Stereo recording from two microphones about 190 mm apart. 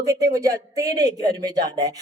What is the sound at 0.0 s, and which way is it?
Speech, 15° right (ahead or behind).